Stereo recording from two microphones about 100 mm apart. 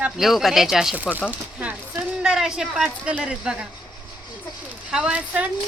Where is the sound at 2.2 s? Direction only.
5° right (ahead or behind).